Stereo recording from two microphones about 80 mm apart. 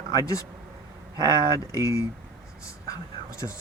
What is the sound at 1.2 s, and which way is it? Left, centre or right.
Speech, left.